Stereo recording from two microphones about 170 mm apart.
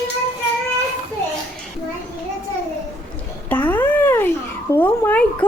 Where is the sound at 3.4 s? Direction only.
10° left (ahead or behind).